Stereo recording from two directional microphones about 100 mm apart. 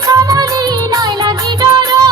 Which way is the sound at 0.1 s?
35° right (ahead or behind).